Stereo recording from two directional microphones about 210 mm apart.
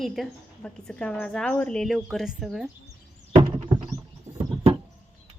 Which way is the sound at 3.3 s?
25° right (ahead or behind).